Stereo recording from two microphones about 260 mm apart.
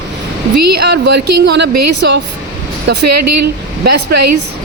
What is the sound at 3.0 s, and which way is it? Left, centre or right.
Speech, right.